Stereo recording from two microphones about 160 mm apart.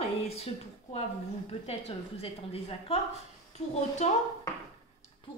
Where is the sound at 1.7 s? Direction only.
40° left (ahead or behind).